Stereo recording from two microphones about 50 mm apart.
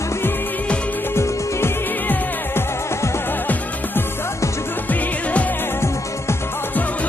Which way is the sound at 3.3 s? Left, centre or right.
Left.